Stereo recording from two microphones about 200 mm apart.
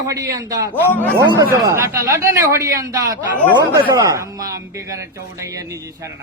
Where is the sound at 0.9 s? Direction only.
10° left (ahead or behind).